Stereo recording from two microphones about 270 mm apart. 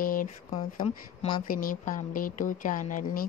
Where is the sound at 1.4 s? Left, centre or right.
Left.